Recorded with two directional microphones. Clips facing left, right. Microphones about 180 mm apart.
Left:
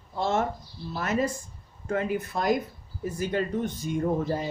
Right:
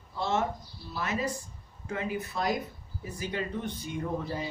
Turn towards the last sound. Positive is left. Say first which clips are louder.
# left 6 dB
turn(degrees=45)  # may be behind; listen again after turning